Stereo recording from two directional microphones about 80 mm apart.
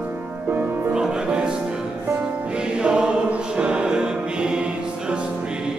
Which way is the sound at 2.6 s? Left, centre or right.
Centre.